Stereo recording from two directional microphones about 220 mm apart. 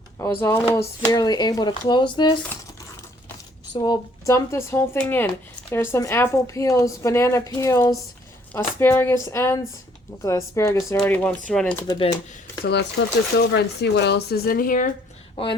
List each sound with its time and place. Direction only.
0.2 s speech: 15° left (ahead or behind)
3.8 s speech: 15° left (ahead or behind)
11.9 s speech: 20° left (ahead or behind)
12.6 s speech: 50° left (ahead or behind)